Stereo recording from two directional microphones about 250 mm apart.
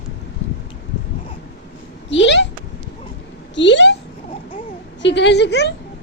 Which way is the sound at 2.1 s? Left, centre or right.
Left.